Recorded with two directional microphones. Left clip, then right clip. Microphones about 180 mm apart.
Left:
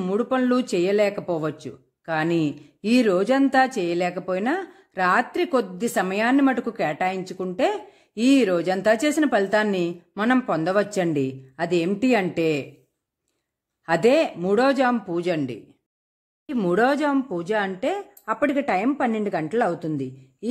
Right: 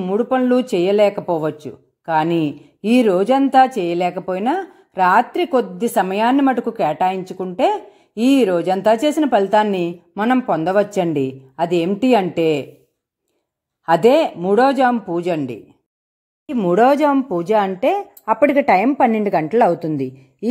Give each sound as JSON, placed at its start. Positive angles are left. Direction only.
{"t": 0.0, "sound": "speech", "side_deg": 0}
{"t": 13.8, "sound": "speech", "side_deg": -5}